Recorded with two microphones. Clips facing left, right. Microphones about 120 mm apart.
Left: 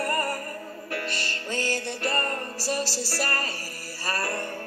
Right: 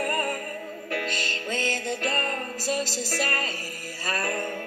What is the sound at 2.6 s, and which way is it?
Music, 5° left (ahead or behind).